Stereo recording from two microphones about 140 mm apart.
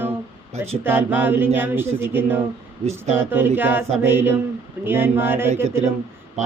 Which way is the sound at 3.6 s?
15° right (ahead or behind).